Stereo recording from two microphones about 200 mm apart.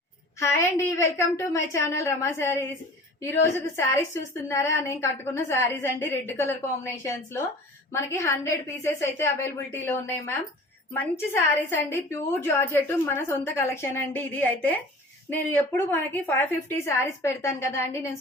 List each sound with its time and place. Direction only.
0.3 s a woman's voice: 15° left (ahead or behind)
3.8 s a woman's voice: 15° left (ahead or behind)